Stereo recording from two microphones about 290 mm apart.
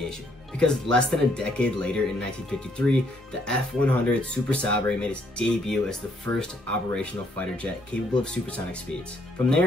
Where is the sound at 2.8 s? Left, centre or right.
Right.